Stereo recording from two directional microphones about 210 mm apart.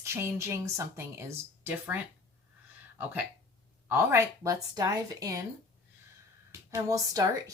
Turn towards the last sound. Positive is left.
turn(degrees=-15)  # may be behind; listen again after turning